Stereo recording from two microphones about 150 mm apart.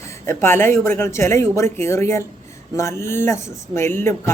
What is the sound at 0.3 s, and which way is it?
Speech, 15° left (ahead or behind).